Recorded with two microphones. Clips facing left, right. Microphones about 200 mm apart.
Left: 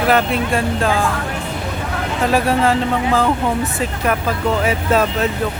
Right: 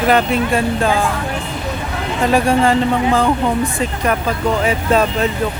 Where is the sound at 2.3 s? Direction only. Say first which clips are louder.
Right 2 dB; 5° left (ahead or behind).